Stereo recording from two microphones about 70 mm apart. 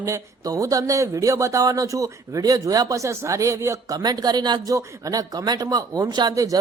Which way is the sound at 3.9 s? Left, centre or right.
Right.